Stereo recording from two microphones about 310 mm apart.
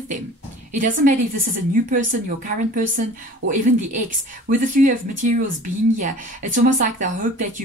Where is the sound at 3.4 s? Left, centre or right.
Right.